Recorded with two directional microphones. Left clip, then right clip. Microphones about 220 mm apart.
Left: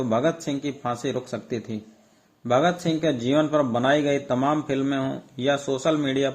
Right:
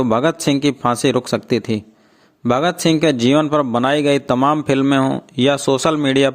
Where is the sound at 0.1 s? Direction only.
45° right (ahead or behind).